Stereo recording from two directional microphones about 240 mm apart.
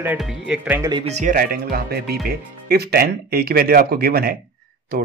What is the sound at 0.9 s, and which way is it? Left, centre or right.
Speech, right.